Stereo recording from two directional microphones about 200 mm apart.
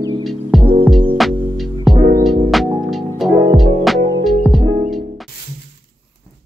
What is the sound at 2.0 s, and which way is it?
Music, 45° right (ahead or behind).